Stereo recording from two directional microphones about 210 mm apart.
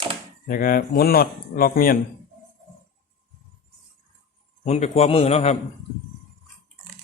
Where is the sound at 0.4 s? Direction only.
40° left (ahead or behind).